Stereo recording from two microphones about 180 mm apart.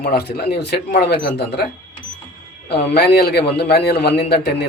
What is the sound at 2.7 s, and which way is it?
Speech, 60° left (ahead or behind).